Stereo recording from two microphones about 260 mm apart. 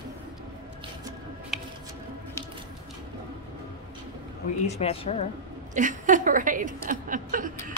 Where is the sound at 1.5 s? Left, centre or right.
Centre.